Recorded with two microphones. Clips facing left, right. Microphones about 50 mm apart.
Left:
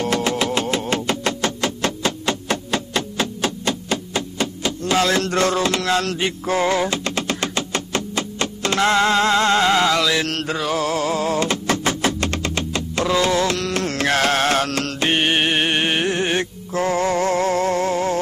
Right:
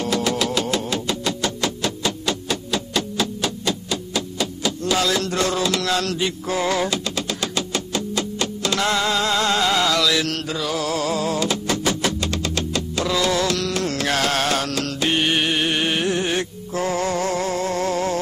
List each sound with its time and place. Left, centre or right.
0.0 s vehicle: left
0.8 s music: left
6.6 s music: left
7.1 s music: left
10.3 s a sound: left
12.5 s music: left